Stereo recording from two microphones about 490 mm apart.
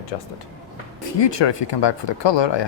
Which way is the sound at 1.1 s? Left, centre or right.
Left.